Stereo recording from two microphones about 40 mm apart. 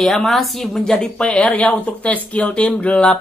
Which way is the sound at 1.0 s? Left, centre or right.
Left.